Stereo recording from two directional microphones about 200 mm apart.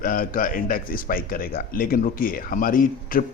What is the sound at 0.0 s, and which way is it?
A man's voice, 45° left (ahead or behind).